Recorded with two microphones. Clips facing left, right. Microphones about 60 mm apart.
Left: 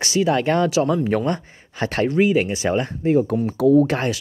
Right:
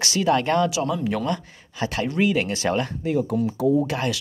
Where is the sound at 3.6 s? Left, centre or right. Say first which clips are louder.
Left 7 dB; left.